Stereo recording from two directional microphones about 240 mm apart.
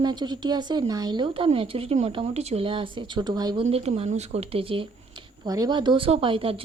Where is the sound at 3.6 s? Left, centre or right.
Right.